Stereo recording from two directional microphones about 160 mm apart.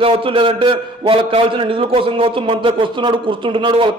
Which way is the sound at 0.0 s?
35° right (ahead or behind).